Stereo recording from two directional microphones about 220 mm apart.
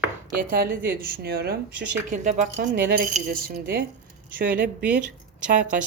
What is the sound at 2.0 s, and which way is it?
Speech, 35° right (ahead or behind).